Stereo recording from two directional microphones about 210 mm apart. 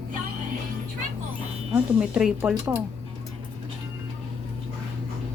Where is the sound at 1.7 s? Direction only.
5° right (ahead or behind).